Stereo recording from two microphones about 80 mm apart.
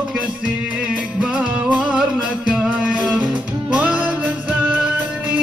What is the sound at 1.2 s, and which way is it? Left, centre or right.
Music, centre.